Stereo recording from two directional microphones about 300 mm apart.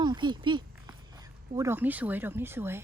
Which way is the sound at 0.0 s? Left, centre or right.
Centre.